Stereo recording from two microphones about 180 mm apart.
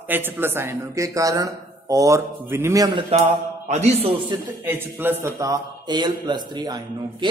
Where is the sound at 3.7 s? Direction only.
35° right (ahead or behind).